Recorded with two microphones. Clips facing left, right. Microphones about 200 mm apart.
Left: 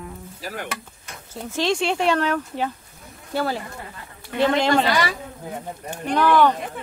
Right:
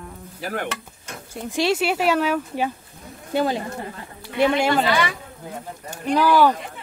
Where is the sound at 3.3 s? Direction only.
20° right (ahead or behind).